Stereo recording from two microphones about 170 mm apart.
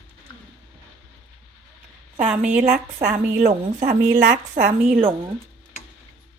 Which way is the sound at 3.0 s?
45° right (ahead or behind).